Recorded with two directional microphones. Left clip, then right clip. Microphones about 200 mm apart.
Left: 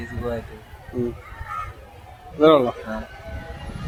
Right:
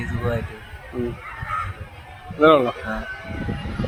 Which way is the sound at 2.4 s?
5° left (ahead or behind).